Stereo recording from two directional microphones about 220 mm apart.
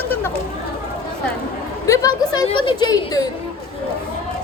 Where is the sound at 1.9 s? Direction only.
15° left (ahead or behind).